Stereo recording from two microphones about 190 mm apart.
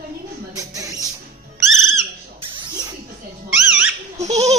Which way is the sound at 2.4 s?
25° right (ahead or behind).